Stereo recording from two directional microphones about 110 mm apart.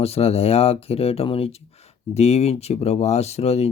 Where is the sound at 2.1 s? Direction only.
75° left (ahead or behind).